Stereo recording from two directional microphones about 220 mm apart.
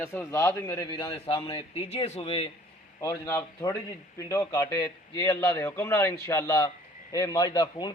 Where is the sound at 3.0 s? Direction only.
15° left (ahead or behind).